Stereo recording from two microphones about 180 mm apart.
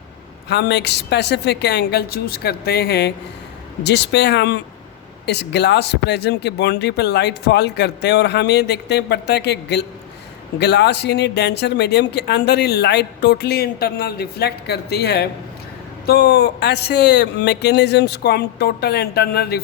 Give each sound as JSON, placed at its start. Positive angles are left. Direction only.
{"t": 0.4, "sound": "speech", "side_deg": 70}